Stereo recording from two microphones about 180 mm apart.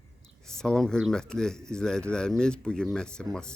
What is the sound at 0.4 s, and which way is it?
Speech, 5° left (ahead or behind).